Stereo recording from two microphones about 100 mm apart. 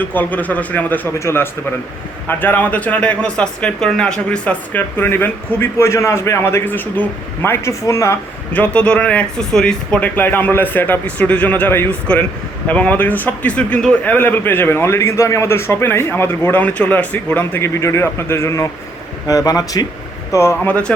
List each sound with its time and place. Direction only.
0.1 s a man's voice: 15° left (ahead or behind)
8.5 s a man's voice: 15° left (ahead or behind)
17.6 s a man's voice: 30° left (ahead or behind)
20.7 s speech: 15° left (ahead or behind)